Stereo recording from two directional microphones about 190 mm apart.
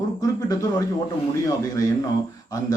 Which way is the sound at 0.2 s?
20° left (ahead or behind).